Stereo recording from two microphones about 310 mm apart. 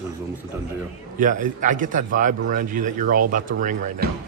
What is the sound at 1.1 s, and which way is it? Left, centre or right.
A man's voice, right.